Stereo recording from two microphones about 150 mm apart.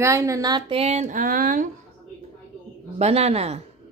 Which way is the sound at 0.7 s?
45° right (ahead or behind).